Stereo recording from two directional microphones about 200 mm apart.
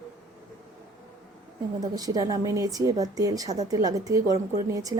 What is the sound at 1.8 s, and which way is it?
Speech, 20° right (ahead or behind).